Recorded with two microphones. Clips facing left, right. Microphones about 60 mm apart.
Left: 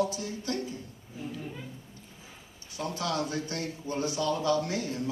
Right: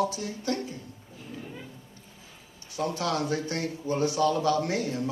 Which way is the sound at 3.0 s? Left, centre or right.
Right.